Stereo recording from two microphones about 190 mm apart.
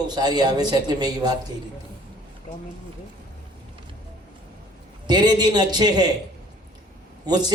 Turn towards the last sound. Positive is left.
turn(degrees=-20)  # may be behind; listen again after turning